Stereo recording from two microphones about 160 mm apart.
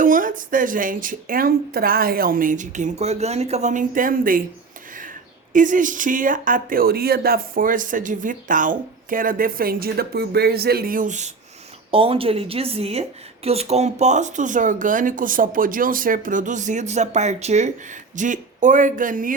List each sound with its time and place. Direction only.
0.0 s speech: 55° right (ahead or behind)
5.5 s speech: 55° right (ahead or behind)
11.9 s a woman's voice: 35° right (ahead or behind); by 19.3 s 55° right (ahead or behind)